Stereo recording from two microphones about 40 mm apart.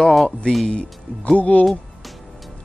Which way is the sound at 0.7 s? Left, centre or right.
Left.